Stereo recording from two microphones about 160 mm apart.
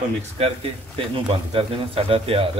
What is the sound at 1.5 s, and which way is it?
Speech, 35° right (ahead or behind).